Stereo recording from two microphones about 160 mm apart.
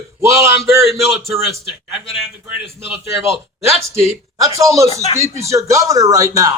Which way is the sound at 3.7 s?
40° left (ahead or behind).